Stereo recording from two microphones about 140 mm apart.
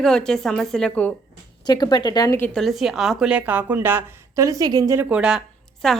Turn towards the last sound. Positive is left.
turn(degrees=0)  # may be behind; listen again after turning